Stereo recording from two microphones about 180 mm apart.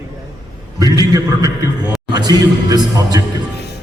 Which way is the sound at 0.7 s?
20° right (ahead or behind).